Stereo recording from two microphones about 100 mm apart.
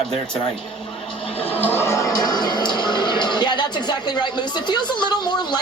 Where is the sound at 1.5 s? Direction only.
20° left (ahead or behind).